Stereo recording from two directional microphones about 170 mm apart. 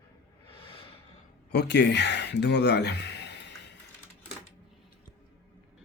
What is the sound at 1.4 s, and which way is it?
Speech, 80° left.